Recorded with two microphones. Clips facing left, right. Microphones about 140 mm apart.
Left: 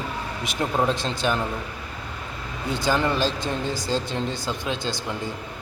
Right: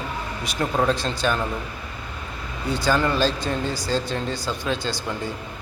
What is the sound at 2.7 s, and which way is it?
A man's voice, 20° left (ahead or behind).